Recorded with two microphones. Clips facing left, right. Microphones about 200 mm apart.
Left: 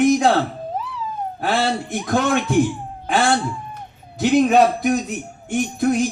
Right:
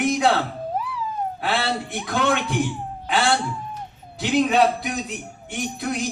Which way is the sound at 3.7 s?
45° left (ahead or behind).